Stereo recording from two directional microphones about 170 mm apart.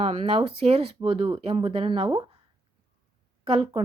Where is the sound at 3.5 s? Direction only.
35° right (ahead or behind).